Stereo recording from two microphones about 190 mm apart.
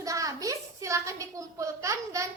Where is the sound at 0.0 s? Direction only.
15° right (ahead or behind).